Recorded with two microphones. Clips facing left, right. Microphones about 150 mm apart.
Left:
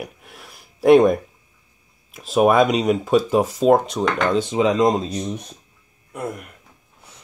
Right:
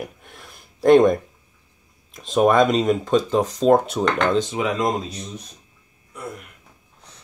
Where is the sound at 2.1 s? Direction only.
5° left (ahead or behind).